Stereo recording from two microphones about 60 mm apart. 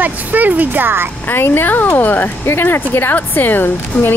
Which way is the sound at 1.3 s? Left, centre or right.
Left.